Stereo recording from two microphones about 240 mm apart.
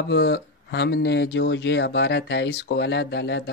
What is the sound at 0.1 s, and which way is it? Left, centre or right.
Speech, left.